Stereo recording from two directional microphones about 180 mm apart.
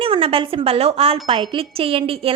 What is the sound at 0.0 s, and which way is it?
Speech, 30° right (ahead or behind).